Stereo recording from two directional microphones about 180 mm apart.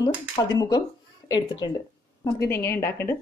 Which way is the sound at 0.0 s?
20° left (ahead or behind).